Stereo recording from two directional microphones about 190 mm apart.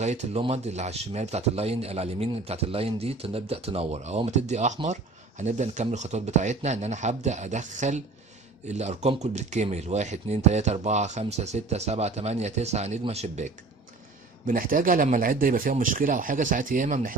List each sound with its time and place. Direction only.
0.0 s speech: 35° right (ahead or behind)
14.4 s speech: 45° right (ahead or behind)